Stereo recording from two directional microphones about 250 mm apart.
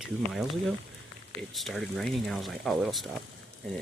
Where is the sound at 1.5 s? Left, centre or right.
Centre.